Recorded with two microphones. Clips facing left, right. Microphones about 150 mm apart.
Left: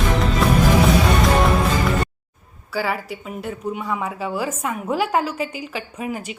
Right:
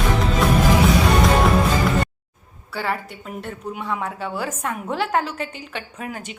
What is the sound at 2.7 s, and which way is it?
A woman's voice, 5° left (ahead or behind).